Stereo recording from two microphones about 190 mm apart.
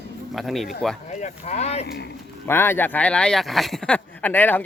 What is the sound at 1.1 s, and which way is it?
Speech, 40° left (ahead or behind).